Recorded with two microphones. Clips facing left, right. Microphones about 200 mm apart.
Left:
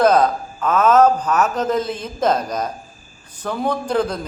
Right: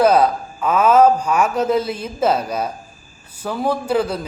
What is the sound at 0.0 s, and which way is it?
Speech, 10° right (ahead or behind).